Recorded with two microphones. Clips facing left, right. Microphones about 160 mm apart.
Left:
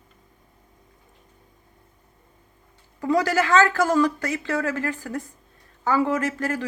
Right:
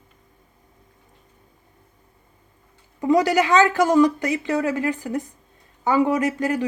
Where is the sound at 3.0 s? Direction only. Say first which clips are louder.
Right 3 dB; 20° right (ahead or behind).